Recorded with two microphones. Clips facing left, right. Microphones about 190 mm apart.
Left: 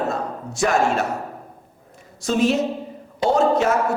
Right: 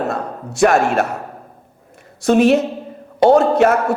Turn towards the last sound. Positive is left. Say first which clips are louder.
# right 6 dB
turn(degrees=-60)  # may be behind; listen again after turning